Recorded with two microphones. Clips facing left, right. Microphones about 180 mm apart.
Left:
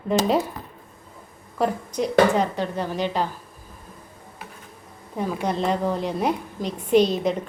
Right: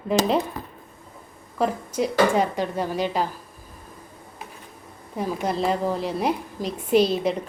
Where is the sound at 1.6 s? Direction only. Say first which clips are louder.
Even; 5° right (ahead or behind).